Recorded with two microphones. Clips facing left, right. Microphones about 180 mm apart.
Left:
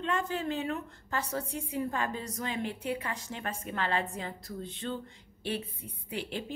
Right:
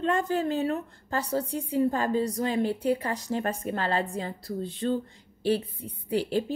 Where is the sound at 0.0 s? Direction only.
40° right (ahead or behind).